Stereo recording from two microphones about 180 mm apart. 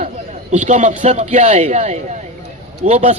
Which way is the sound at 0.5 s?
40° right (ahead or behind).